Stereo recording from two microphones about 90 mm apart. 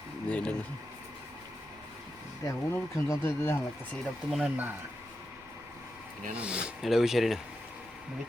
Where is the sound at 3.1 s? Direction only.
25° left (ahead or behind).